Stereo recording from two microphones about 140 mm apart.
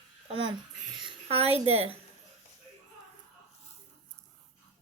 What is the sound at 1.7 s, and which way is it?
Speech, 45° right (ahead or behind).